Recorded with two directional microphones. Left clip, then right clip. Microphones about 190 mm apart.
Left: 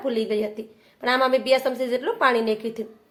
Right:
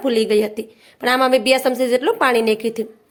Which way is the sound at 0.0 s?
45° right (ahead or behind).